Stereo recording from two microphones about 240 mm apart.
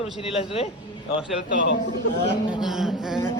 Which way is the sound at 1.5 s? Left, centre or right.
Left.